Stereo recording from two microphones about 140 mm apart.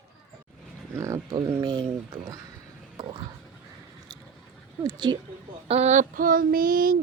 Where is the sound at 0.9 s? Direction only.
20° right (ahead or behind).